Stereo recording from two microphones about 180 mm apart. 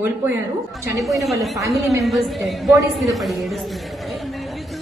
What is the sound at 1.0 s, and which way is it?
A woman's voice, centre (ahead or behind).